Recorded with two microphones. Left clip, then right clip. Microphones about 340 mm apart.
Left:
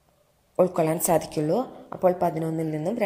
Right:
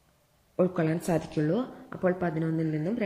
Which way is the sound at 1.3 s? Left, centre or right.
Left.